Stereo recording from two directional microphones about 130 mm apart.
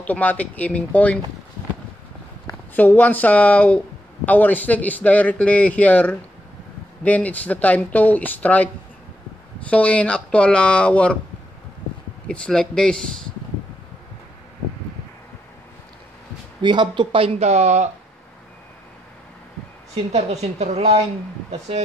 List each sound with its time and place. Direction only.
0.0 s a man's voice: 10° left (ahead or behind)
2.7 s a man's voice: 15° left (ahead or behind)
9.7 s a man's voice: 10° left (ahead or behind)
12.3 s a man's voice: 5° left (ahead or behind)
16.6 s speech: 35° right (ahead or behind); by 17.8 s 60° right (ahead or behind)
20.1 s a woman's voice: 55° right (ahead or behind)